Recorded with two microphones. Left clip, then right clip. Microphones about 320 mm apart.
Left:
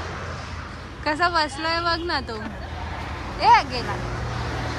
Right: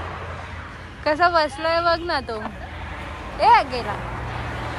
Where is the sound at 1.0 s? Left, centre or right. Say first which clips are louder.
Right 3 dB; centre.